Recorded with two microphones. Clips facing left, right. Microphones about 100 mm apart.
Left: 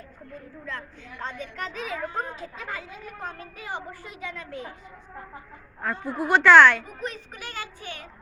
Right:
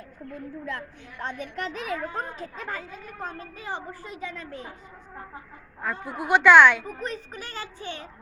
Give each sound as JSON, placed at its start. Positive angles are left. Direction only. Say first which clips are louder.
{"t": 1.4, "sound": "speech", "louder": "right 1 dB", "side_deg": -55}
{"t": 5.8, "sound": "speech", "louder": "left 3 dB", "side_deg": -5}
{"t": 6.8, "sound": "speech", "louder": "right 2 dB", "side_deg": -35}